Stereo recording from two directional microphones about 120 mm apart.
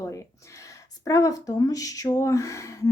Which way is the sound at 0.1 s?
25° left (ahead or behind).